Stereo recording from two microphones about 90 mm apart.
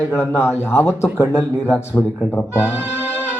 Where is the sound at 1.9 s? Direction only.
15° left (ahead or behind).